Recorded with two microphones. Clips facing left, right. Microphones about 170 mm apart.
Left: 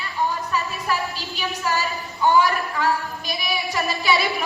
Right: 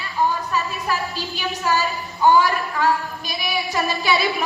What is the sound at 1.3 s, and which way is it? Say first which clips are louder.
A woman's voice: right 3 dB; 40° right (ahead or behind).